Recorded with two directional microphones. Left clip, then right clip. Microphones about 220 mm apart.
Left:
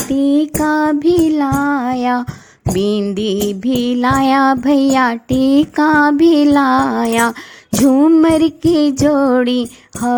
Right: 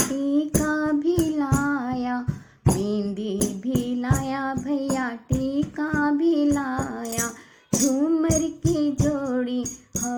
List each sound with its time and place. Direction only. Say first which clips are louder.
0.1 s child singing: left 9 dB; 30° left (ahead or behind); by 7.3 s 45° left (ahead or behind)
7.9 s child singing: left 13 dB; 30° left (ahead or behind)